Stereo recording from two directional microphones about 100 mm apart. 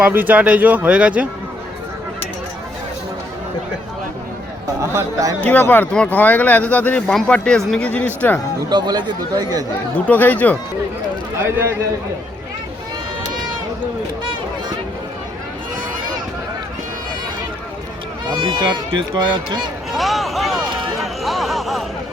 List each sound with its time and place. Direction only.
0.1 s speech: 15° right (ahead or behind)
4.8 s speech: 30° right (ahead or behind)
5.5 s speech: 20° left (ahead or behind)
8.7 s speech: 45° right (ahead or behind)
10.1 s speech: 15° left (ahead or behind)
11.4 s speech: 25° right (ahead or behind)
18.3 s speech: 55° right (ahead or behind)
19.9 s a sound: centre (ahead or behind)